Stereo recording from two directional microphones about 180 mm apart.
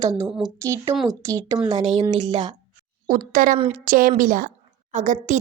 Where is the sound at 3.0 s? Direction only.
45° right (ahead or behind).